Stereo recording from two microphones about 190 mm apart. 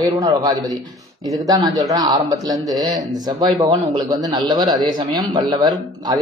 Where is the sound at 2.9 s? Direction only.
40° right (ahead or behind).